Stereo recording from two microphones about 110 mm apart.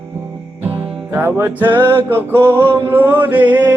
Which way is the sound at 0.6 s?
20° right (ahead or behind).